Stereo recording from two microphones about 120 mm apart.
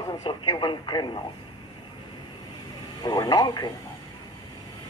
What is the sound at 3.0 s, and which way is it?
Speech, 35° left (ahead or behind).